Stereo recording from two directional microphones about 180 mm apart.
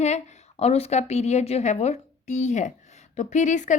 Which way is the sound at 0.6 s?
35° left (ahead or behind).